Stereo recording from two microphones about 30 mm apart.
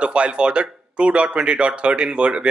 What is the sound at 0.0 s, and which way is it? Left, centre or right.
Speech, right.